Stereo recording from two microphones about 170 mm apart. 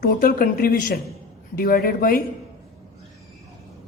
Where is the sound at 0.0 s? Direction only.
55° left (ahead or behind).